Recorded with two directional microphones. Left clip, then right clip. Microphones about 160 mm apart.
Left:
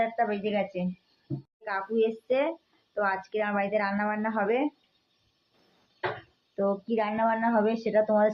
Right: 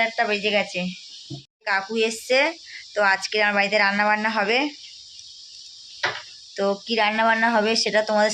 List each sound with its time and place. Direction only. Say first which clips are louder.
0.0 s speech: right 6 dB; 20° right (ahead or behind)
6.6 s speech: right 6 dB; 15° right (ahead or behind)